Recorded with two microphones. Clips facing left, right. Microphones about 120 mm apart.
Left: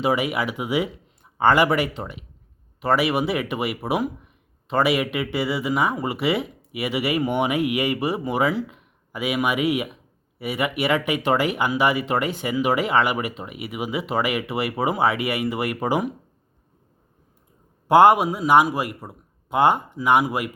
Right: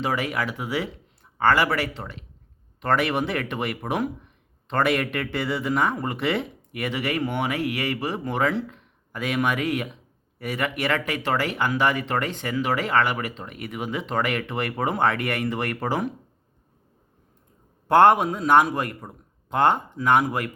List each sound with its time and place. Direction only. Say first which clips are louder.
0.0 s speech: left 4 dB; 15° left (ahead or behind)
17.8 s speech: left 2 dB; 10° left (ahead or behind)